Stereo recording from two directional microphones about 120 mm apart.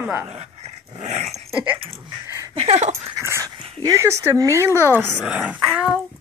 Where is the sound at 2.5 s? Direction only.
60° right (ahead or behind).